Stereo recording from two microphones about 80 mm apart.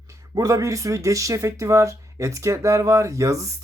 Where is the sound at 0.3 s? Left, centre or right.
Right.